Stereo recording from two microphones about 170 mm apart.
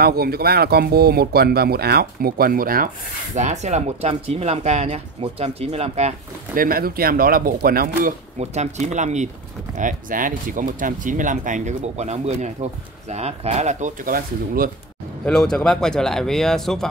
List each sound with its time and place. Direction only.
0.0 s speech: 65° right (ahead or behind)
3.3 s speech: 45° right (ahead or behind)
6.5 s speech: 55° right (ahead or behind)
8.4 s speech: 45° right (ahead or behind)
15.2 s speech: 5° left (ahead or behind)